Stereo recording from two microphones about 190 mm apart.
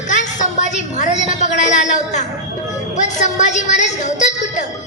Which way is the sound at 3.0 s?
40° left (ahead or behind).